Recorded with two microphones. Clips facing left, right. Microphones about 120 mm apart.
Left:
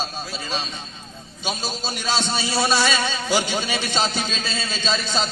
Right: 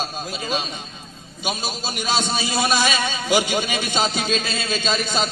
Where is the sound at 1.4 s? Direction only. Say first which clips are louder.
Right 1 dB; 10° right (ahead or behind).